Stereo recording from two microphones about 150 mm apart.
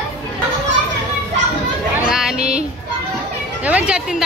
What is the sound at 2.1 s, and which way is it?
Child singing, 5° right (ahead or behind).